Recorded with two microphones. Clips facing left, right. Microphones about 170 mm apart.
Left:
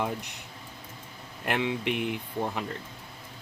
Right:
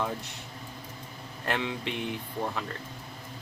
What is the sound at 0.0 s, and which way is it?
Speech, 20° left (ahead or behind).